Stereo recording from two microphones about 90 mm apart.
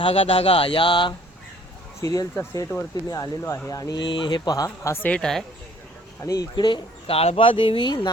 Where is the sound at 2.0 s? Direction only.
40° left (ahead or behind).